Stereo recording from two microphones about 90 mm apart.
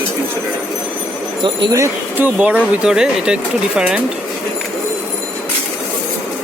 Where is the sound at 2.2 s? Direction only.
15° right (ahead or behind).